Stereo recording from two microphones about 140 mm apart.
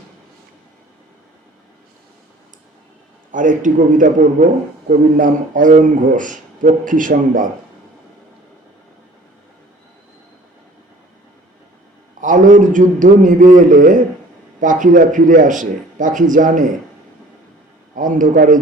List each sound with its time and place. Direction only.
3.3 s a man's voice: 70° right (ahead or behind)
12.2 s a man's voice: 65° right (ahead or behind)
17.9 s a man's voice: 70° right (ahead or behind)